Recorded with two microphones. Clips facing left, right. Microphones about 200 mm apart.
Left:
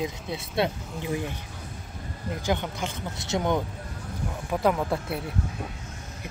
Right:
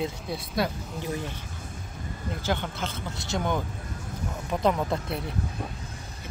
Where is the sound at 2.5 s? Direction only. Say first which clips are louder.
Left 2 dB; 15° left (ahead or behind).